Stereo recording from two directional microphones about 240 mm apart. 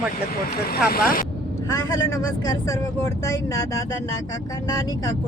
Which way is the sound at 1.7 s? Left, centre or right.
Centre.